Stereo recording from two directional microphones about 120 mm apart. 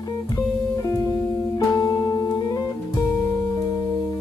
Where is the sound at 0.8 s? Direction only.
25° left (ahead or behind).